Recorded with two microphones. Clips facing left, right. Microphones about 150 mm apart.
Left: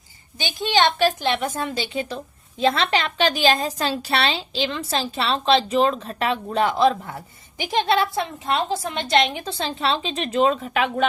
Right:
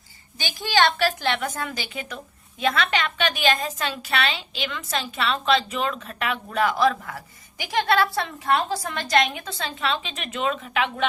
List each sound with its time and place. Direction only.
0.3 s a woman's voice: 20° left (ahead or behind); by 11.0 s 40° left (ahead or behind)